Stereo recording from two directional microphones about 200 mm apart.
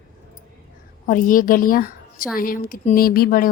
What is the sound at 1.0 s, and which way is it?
A woman's voice, 40° left (ahead or behind).